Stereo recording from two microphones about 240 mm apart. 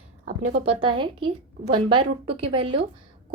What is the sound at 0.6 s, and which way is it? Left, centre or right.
Speech, right.